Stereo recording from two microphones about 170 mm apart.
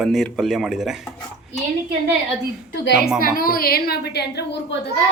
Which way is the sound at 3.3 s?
55° left (ahead or behind).